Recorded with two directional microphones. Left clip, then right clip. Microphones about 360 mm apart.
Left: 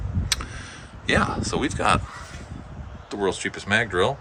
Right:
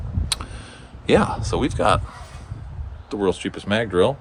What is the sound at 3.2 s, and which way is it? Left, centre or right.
Speech, centre.